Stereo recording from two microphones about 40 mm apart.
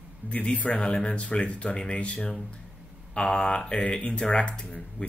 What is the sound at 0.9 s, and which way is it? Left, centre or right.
Speech, left.